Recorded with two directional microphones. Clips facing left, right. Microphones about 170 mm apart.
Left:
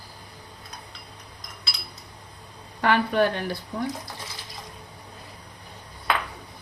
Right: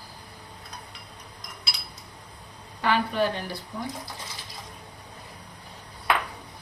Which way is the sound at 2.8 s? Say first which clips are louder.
Left 3 dB; 55° left (ahead or behind).